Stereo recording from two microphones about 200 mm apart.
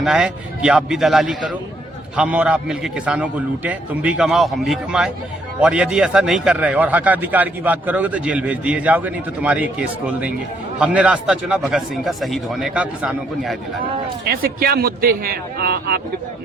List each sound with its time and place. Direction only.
0.0 s a man's voice: 5° right (ahead or behind)
10.8 s a man's voice: 5° right (ahead or behind)
14.3 s a man's voice: 50° right (ahead or behind)